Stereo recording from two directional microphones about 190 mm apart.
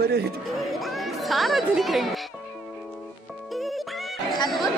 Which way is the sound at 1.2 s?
Centre (ahead or behind).